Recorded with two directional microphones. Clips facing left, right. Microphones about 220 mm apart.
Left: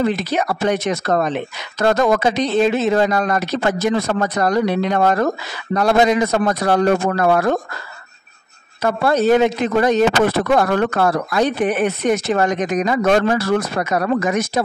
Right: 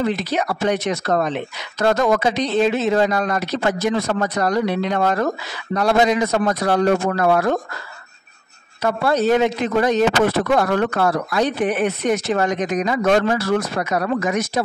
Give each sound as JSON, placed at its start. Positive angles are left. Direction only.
{"t": 0.1, "sound": "speech", "side_deg": 50}
{"t": 8.8, "sound": "speech", "side_deg": 50}